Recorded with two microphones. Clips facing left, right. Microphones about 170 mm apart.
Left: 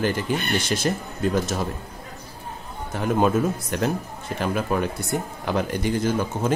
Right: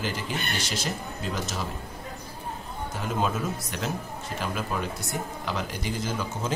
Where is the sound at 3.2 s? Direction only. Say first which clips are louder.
Left 7 dB; 50° left (ahead or behind).